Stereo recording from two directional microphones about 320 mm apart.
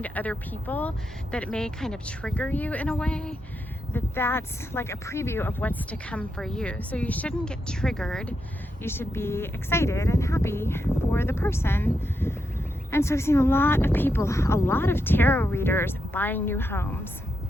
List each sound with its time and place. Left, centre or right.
0.0 s speech: centre